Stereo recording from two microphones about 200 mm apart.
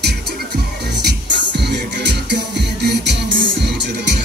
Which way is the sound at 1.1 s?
55° right (ahead or behind).